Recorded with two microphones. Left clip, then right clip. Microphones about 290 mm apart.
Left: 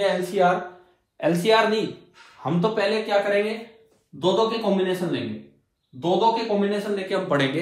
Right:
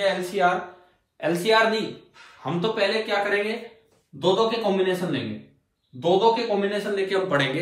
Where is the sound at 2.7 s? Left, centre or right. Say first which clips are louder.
Left 1 dB; centre.